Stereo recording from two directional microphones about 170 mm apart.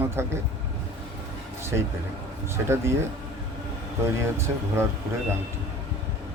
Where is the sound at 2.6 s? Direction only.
15° right (ahead or behind).